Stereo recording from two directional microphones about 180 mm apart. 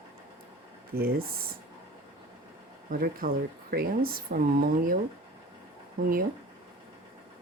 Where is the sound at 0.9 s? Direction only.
55° right (ahead or behind).